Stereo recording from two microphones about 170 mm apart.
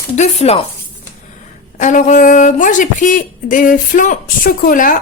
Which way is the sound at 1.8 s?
45° left (ahead or behind).